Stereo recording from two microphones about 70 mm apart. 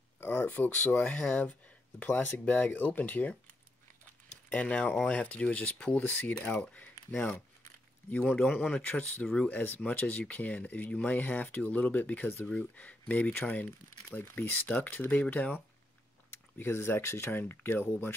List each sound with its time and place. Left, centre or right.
0.2 s speech: left
8.5 s speech: centre
9.5 s speech: left
16.5 s speech: left
17.3 s speech: left